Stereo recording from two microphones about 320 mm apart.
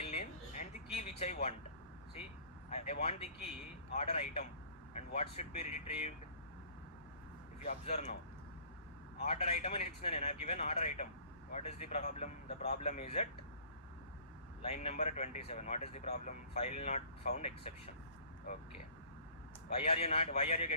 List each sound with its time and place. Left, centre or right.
0.0 s a sound: centre
2.6 s speech: centre
7.6 s speech: centre
9.2 s speech: centre
14.6 s speech: centre
19.7 s speech: centre